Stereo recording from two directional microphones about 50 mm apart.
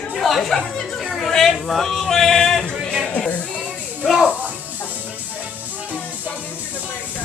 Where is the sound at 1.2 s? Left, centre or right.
Centre.